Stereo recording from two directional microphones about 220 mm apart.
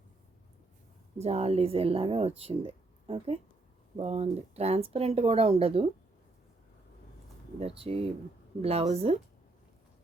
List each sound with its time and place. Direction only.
1.2 s speech: 30° right (ahead or behind)
7.6 s speech: 25° right (ahead or behind)